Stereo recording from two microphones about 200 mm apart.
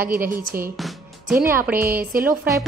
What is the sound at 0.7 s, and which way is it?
Music, centre (ahead or behind).